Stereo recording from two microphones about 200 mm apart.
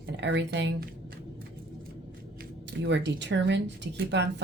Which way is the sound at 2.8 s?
60° right (ahead or behind).